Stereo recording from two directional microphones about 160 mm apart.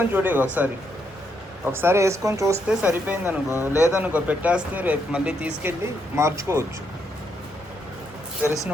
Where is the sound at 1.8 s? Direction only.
20° right (ahead or behind).